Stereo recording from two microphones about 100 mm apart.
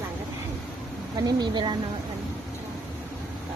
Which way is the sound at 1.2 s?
40° right (ahead or behind).